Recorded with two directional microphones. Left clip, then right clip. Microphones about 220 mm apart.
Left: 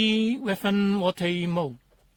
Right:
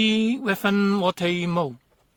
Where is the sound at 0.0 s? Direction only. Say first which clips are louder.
Right 2 dB; 35° right (ahead or behind).